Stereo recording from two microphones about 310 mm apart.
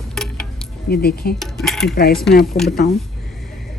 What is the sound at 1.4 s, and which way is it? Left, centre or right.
Speech, centre.